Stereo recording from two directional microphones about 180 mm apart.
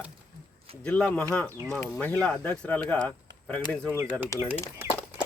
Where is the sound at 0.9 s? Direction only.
5° left (ahead or behind).